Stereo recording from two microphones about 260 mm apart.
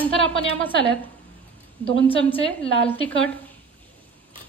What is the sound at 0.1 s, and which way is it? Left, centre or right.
Speech, left.